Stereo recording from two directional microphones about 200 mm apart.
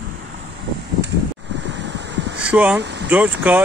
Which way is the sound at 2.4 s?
5° right (ahead or behind).